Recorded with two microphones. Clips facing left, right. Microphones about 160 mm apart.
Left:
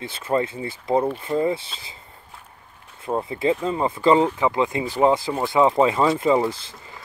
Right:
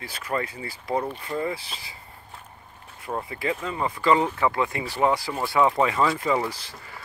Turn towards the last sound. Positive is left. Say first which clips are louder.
# even
turn(degrees=20)  # may be behind; listen again after turning